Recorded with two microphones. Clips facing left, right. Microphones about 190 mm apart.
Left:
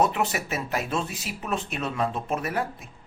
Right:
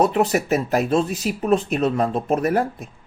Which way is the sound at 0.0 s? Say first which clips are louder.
Right 6 dB; 35° right (ahead or behind).